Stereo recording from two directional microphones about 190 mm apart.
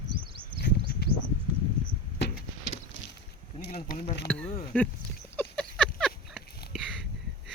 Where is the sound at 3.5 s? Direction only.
50° left (ahead or behind).